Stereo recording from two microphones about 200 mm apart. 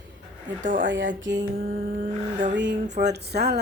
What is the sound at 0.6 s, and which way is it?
Mantra, 40° right (ahead or behind).